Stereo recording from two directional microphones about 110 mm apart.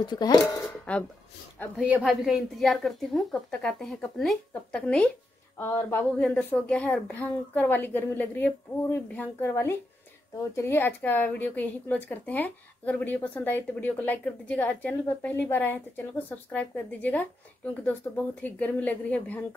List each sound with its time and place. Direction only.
0.0 s speech: 40° left (ahead or behind)
0.7 s speech: 10° left (ahead or behind)
1.8 s speech: 15° right (ahead or behind)
2.0 s a woman's voice: centre (ahead or behind)
5.6 s speech: 20° left (ahead or behind)
6.2 s speech: 10° left (ahead or behind)